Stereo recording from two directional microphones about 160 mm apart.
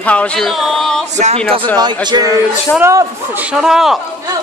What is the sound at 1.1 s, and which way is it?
Speech, 45° right (ahead or behind).